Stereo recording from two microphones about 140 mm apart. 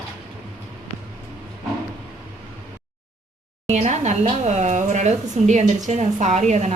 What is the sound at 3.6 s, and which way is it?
A woman's voice, 55° right (ahead or behind).